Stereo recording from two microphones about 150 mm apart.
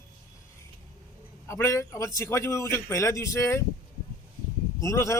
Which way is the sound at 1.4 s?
20° left (ahead or behind).